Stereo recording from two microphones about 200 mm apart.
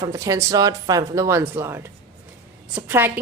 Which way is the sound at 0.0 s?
15° right (ahead or behind).